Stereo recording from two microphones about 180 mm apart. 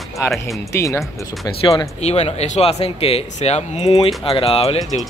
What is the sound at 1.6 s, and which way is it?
Speech, 30° left (ahead or behind).